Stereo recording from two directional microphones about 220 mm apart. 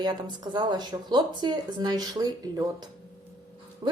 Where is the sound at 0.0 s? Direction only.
20° right (ahead or behind).